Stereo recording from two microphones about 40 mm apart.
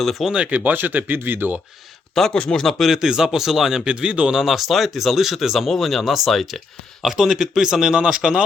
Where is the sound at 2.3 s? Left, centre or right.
Left.